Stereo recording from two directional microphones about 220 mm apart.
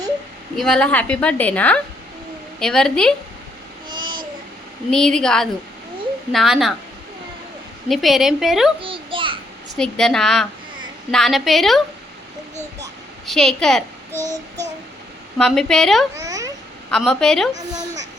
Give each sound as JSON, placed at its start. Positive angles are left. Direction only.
{"t": 0.5, "sound": "a woman's voice", "side_deg": 0}
{"t": 3.8, "sound": "a sound", "side_deg": -20}
{"t": 4.9, "sound": "a woman's voice", "side_deg": 5}
{"t": 7.9, "sound": "a woman's voice", "side_deg": 0}
{"t": 8.8, "sound": "babbling", "side_deg": -25}
{"t": 9.7, "sound": "a woman's voice", "side_deg": 5}
{"t": 13.2, "sound": "a child's voice", "side_deg": 0}
{"t": 15.4, "sound": "a woman's voice", "side_deg": 0}
{"t": 16.2, "sound": "babbling", "side_deg": -15}
{"t": 16.9, "sound": "a woman's voice", "side_deg": 0}